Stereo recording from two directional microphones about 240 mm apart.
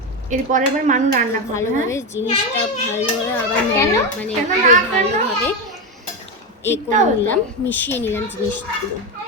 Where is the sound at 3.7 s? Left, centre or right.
Centre.